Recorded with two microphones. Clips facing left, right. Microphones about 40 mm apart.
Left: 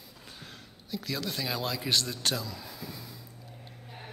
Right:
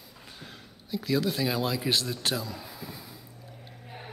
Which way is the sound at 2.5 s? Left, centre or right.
Centre.